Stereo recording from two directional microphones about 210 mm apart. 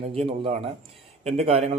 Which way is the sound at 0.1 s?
25° right (ahead or behind).